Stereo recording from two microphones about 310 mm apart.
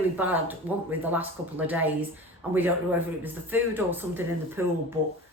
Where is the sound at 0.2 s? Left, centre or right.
Centre.